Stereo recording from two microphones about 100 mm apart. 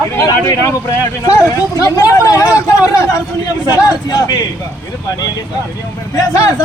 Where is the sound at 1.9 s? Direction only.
35° left (ahead or behind).